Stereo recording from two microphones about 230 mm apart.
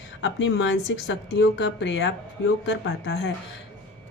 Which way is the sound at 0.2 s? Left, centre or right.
Left.